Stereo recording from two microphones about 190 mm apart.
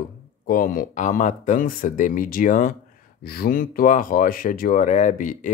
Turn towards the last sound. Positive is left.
turn(degrees=40)  # may be behind; listen again after turning